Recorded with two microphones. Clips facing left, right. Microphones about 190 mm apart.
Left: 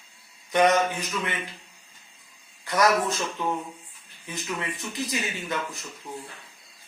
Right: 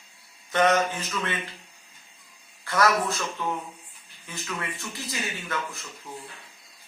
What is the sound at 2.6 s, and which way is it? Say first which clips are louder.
Speech: left 1 dB; 15° left (ahead or behind).